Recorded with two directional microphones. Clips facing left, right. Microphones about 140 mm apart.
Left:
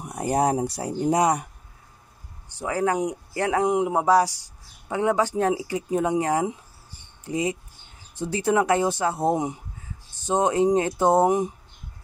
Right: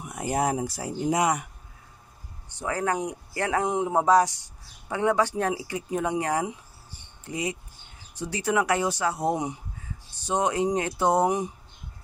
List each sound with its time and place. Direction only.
0.0 s speech: 35° left (ahead or behind)
2.6 s speech: 10° left (ahead or behind)